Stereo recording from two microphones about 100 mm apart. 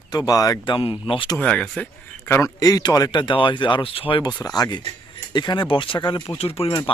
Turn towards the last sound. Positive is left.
turn(degrees=55)  # may be behind; listen again after turning